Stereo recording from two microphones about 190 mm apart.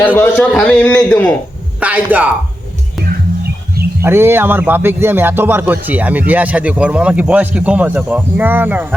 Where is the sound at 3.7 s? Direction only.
55° right (ahead or behind).